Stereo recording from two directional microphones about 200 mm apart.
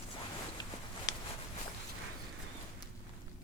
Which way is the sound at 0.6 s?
20° left (ahead or behind).